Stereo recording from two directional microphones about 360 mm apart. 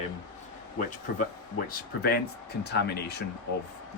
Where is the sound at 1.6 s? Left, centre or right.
Left.